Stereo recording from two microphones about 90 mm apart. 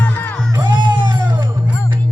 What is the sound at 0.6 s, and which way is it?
Music, 60° right (ahead or behind).